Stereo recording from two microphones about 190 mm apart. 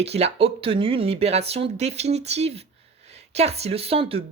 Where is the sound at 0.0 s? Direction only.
35° right (ahead or behind).